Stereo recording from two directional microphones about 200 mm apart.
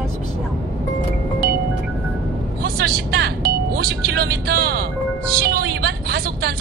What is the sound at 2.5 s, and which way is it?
Music, 50° right (ahead or behind).